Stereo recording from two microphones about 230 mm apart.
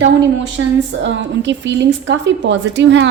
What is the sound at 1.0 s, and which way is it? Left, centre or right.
A woman's voice, right.